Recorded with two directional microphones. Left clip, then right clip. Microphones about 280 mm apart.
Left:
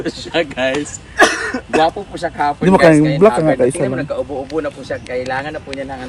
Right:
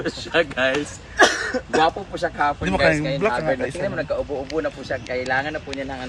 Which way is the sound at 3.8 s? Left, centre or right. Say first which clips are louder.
Left 5 dB; left.